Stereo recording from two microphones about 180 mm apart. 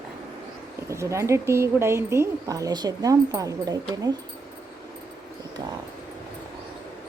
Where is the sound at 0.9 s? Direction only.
15° right (ahead or behind).